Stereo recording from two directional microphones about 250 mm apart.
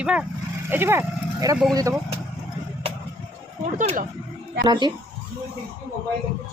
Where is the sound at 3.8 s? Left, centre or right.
Right.